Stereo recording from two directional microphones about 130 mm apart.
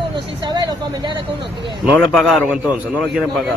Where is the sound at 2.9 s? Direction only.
15° left (ahead or behind).